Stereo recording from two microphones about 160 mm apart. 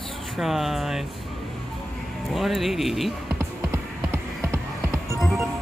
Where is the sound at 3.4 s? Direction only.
15° right (ahead or behind).